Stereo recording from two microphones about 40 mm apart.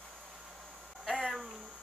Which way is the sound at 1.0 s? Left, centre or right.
Centre.